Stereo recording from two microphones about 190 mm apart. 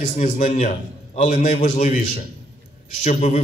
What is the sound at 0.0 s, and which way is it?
A man's voice, 40° left (ahead or behind).